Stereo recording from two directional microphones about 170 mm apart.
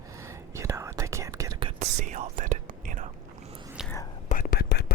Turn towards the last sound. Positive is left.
turn(degrees=70)  # may be behind; listen again after turning